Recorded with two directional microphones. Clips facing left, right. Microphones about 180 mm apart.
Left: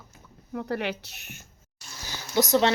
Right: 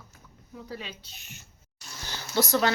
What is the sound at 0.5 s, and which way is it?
Speech, 70° left (ahead or behind).